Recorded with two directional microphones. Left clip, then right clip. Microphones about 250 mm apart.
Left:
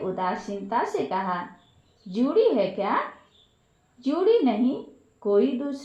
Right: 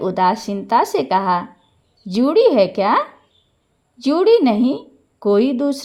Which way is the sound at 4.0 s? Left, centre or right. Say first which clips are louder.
Right 8 dB; right.